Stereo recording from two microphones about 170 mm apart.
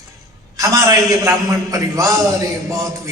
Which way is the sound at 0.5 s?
20° right (ahead or behind).